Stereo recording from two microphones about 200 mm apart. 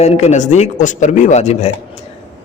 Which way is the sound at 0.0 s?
35° left (ahead or behind).